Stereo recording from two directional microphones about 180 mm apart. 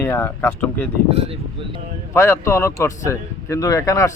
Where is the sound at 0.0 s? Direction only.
15° left (ahead or behind).